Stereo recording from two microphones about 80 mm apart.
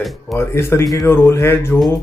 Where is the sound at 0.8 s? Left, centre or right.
Left.